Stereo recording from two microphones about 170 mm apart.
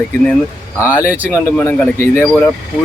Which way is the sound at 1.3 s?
10° left (ahead or behind).